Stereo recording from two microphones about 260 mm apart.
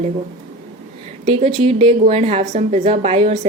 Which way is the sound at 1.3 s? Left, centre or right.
Right.